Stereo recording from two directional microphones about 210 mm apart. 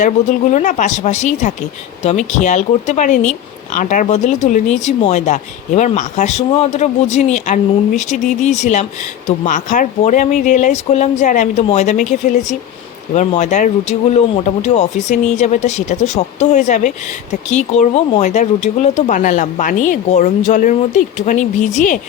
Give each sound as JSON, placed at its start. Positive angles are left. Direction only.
{"t": 0.0, "sound": "speech", "side_deg": 35}